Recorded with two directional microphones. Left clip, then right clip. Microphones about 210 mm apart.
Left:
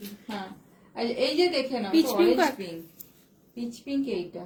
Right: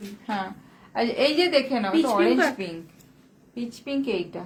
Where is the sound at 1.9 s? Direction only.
Centre (ahead or behind).